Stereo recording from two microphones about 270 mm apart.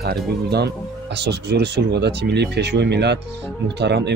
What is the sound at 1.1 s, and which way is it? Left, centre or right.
Speech, right.